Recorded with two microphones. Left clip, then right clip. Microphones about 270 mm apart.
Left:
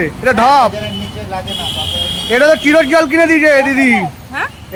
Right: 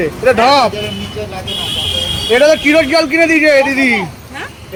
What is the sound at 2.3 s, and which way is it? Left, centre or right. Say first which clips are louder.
A man's voice: even; centre.